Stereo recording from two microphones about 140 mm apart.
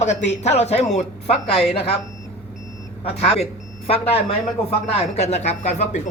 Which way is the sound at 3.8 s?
45° left (ahead or behind).